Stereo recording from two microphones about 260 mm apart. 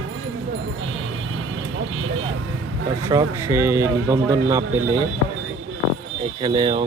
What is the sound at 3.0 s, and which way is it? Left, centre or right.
Speech, centre.